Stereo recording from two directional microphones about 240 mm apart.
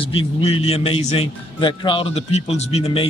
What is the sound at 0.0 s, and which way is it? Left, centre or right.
A man's voice, left.